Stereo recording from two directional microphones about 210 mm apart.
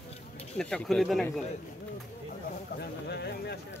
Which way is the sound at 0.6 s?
Centre (ahead or behind).